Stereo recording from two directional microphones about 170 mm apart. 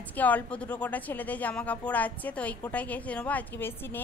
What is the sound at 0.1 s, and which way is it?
A woman's voice, 10° left (ahead or behind).